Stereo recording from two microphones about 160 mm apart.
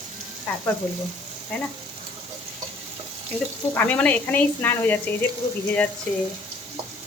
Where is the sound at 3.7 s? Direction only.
10° left (ahead or behind).